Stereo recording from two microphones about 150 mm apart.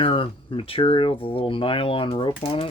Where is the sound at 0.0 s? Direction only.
35° left (ahead or behind).